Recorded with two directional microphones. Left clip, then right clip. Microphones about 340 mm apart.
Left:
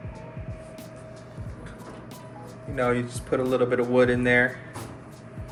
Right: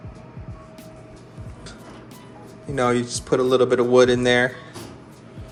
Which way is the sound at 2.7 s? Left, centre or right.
Centre.